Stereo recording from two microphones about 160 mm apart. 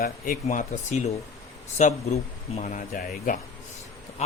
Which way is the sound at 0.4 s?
50° left (ahead or behind).